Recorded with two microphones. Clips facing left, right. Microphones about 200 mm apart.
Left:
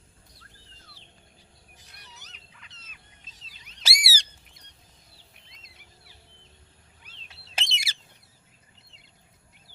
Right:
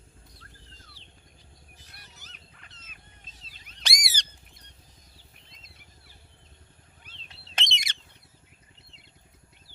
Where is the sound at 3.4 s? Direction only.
50° right (ahead or behind).